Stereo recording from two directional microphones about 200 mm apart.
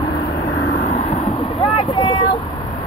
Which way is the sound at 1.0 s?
30° left (ahead or behind).